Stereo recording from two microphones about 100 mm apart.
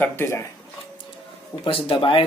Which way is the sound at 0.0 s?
25° left (ahead or behind).